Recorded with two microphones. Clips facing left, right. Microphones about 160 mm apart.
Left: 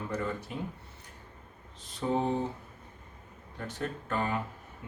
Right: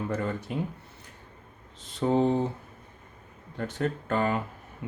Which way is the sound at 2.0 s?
60° right (ahead or behind).